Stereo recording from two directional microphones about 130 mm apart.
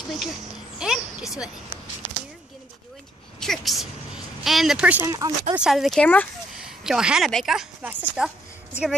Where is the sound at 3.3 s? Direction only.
5° left (ahead or behind).